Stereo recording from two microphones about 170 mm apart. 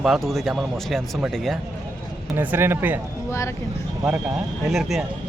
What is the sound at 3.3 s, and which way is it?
Speech, 15° left (ahead or behind).